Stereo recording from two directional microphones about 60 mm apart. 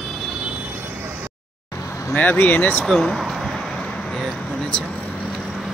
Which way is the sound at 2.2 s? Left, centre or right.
Left.